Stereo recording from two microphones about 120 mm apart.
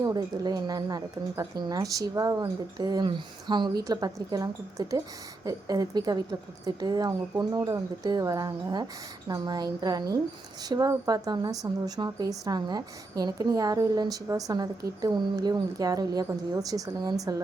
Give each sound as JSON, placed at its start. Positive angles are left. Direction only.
{"t": 0.0, "sound": "speech", "side_deg": -35}